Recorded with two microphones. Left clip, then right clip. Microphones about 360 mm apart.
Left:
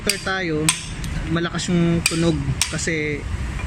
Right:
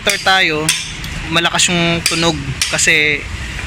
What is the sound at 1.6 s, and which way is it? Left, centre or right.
Hammer, right.